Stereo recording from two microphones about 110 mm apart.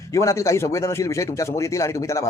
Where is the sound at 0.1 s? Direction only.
30° left (ahead or behind).